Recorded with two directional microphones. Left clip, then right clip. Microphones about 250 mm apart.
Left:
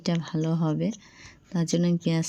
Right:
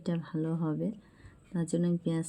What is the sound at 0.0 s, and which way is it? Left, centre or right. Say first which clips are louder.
Speech: left 6 dB; left.